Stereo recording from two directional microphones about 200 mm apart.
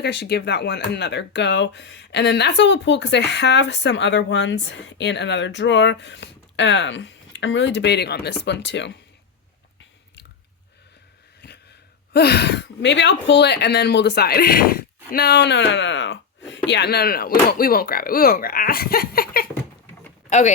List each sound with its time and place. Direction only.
0.0 s speech: 55° left (ahead or behind)
11.3 s a sound: 55° left (ahead or behind)
12.1 s speech: 55° left (ahead or behind)